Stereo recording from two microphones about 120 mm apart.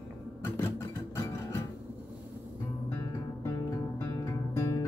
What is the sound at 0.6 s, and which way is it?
Music, 25° left (ahead or behind).